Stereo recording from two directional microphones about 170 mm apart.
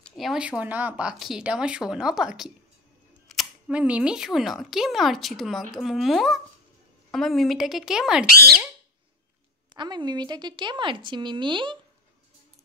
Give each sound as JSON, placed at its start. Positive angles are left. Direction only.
{"t": 0.0, "sound": "speech", "side_deg": 0}
{"t": 8.3, "sound": "speech", "side_deg": -65}
{"t": 9.8, "sound": "a woman's voice", "side_deg": -25}